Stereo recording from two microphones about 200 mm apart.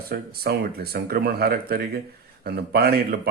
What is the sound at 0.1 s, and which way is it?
Speech, 50° right (ahead or behind).